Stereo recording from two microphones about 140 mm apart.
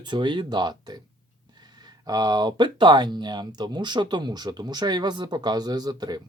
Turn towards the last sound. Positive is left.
turn(degrees=-30)  # may be behind; listen again after turning